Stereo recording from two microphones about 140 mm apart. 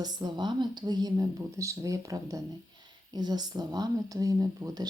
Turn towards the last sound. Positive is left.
turn(degrees=-25)  # may be behind; listen again after turning